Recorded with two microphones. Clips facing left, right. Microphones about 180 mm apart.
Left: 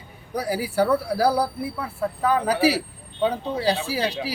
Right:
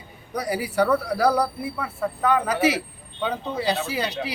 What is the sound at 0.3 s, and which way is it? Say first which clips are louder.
Speech: even; 5° left (ahead or behind).